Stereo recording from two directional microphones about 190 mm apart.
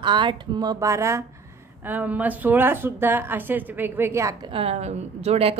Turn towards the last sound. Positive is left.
turn(degrees=-35)  # may be behind; listen again after turning